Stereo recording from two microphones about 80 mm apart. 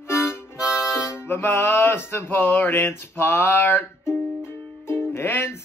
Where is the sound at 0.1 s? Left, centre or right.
Left.